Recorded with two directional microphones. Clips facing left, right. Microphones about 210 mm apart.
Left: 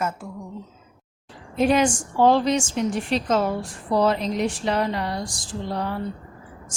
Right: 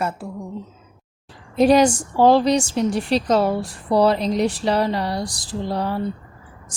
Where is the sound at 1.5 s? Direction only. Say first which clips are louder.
Right 5 dB; 35° right (ahead or behind).